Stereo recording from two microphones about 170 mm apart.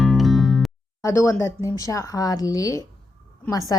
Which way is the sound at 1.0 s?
15° left (ahead or behind).